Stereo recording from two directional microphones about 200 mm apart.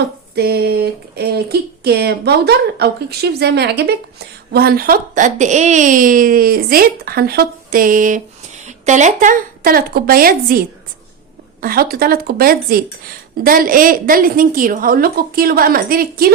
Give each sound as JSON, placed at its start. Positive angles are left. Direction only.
{"t": 0.3, "sound": "speech", "side_deg": -55}